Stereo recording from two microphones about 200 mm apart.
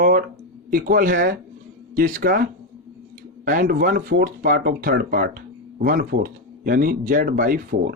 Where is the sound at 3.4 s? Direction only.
45° right (ahead or behind).